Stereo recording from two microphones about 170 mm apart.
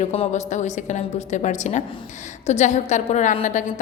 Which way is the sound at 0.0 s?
40° left (ahead or behind).